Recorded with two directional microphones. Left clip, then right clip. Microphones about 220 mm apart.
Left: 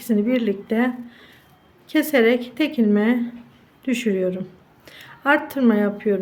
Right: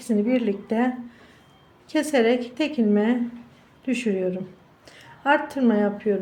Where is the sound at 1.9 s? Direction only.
15° left (ahead or behind).